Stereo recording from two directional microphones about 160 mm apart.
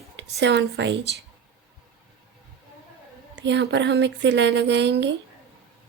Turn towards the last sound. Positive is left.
turn(degrees=-90)